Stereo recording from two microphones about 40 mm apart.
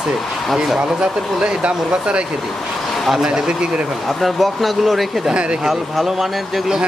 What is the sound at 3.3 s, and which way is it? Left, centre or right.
Speech, right.